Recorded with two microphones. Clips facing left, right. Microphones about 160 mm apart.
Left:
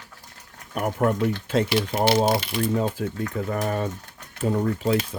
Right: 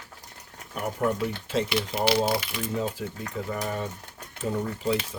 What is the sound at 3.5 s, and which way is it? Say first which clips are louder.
Speech: left 4 dB; 55° left (ahead or behind).